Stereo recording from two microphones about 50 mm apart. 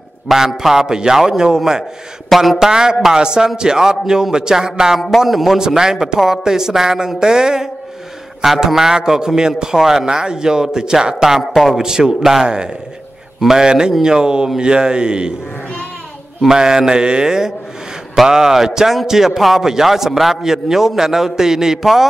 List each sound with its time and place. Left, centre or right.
0.3 s a man's voice: centre
2.2 s speech: centre
2.6 s a man's voice: centre
11.8 s a man's voice: centre
16.4 s a man's voice: centre